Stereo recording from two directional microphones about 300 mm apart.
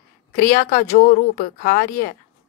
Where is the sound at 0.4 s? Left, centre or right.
Left.